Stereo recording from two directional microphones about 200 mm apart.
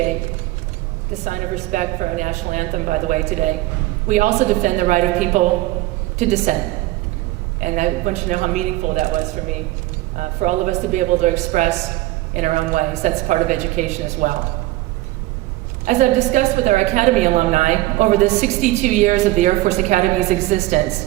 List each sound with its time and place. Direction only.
1.2 s a woman's voice: 40° right (ahead or behind)
7.6 s a woman's voice: 40° right (ahead or behind)
15.9 s a woman's voice: 35° right (ahead or behind)